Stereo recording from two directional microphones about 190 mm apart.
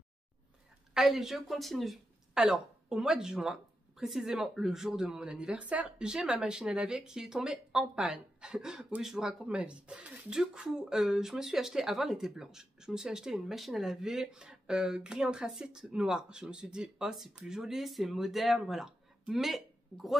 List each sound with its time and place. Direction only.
0.9 s speech: centre (ahead or behind)